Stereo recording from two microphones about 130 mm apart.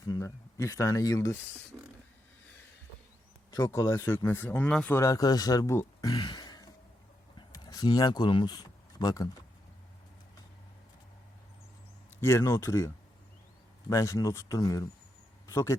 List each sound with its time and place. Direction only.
0.1 s speech: 25° left (ahead or behind)
1.7 s a sound: 10° right (ahead or behind)
3.5 s speech: 25° left (ahead or behind); by 4.9 s 10° left (ahead or behind)
4.9 s speech: 25° left (ahead or behind)
7.3 s a sound: 30° left (ahead or behind)
12.2 s speech: 20° left (ahead or behind)
13.9 s speech: 25° left (ahead or behind)